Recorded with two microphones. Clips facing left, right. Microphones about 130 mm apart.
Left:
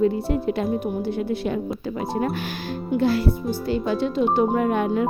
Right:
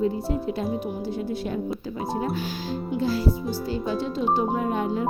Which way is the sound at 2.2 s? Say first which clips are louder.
Left 2 dB; 60° left (ahead or behind).